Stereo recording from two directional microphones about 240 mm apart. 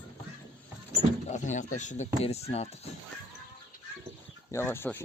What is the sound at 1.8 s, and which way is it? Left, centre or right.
Speech, left.